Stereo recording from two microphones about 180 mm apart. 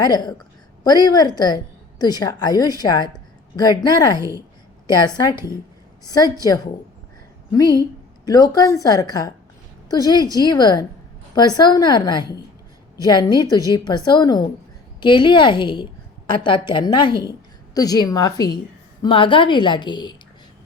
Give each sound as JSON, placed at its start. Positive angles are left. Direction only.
{"t": 0.0, "sound": "a woman's voice", "side_deg": 25}
{"t": 7.5, "sound": "a woman's voice", "side_deg": 20}